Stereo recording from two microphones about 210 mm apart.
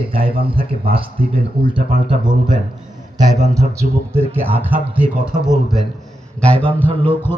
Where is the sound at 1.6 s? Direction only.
25° right (ahead or behind).